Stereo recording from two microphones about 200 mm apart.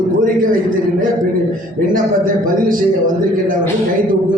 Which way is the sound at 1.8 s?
45° right (ahead or behind).